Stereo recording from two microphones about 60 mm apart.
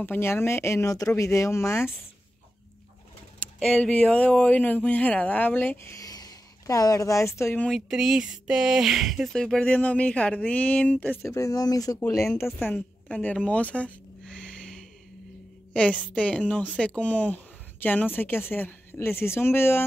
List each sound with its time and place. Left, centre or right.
0.0 s speech: left
0.3 s speech: left
0.8 s speech: left
3.5 s speech: centre; by 5.9 s left
5.9 s speech: left
7.9 s speech: centre
9.3 s speech: centre
9.7 s speech: left
11.2 s speech: left
12.7 s a woman's voice: left
13.5 s a sound: left
16.2 s speech: centre; by 19.9 s left